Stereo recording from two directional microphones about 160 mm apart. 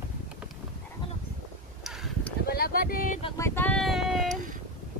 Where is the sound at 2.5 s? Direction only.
70° left (ahead or behind).